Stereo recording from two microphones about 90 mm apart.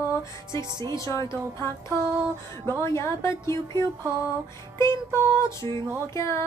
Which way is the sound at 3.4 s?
55° right (ahead or behind).